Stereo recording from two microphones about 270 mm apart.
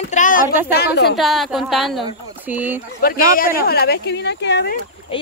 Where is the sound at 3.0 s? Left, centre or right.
Left.